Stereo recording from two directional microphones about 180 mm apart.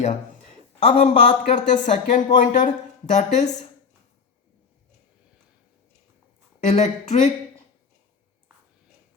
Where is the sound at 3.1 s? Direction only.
40° left (ahead or behind).